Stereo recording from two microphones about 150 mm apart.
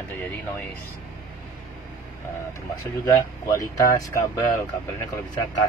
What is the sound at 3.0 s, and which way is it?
Speech, 20° left (ahead or behind).